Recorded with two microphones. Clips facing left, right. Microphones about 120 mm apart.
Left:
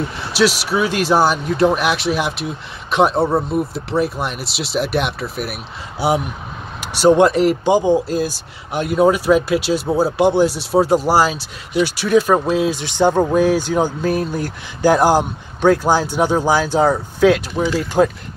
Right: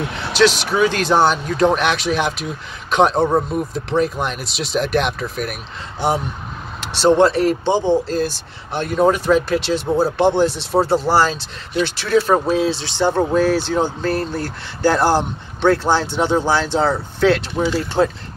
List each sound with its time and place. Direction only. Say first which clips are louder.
0.3 s speech: right 1 dB; 5° left (ahead or behind)